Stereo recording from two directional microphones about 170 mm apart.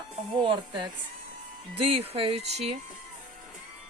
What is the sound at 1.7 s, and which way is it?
Speech, 35° right (ahead or behind).